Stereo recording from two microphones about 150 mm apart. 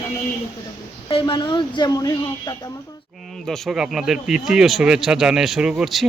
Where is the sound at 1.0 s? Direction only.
35° left (ahead or behind).